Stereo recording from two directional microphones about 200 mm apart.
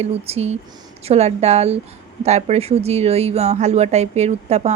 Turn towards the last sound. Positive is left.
turn(degrees=-35)  # may be behind; listen again after turning